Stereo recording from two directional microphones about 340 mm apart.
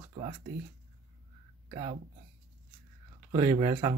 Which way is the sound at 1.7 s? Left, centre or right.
Centre.